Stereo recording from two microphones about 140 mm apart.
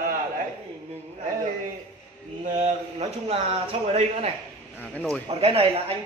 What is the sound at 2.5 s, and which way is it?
A man's voice, 55° right (ahead or behind).